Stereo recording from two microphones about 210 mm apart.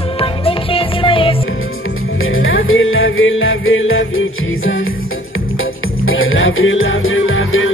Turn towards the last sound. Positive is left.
turn(degrees=70)  # may be behind; listen again after turning